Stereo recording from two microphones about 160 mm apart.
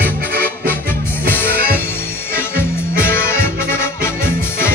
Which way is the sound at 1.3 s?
15° left (ahead or behind).